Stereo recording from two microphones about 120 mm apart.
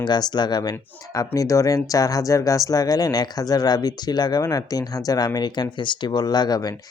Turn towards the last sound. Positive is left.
turn(degrees=35)  # may be behind; listen again after turning